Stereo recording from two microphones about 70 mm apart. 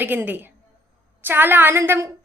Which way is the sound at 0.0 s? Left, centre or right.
Right.